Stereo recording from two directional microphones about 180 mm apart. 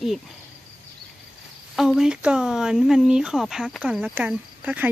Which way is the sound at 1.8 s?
Centre (ahead or behind).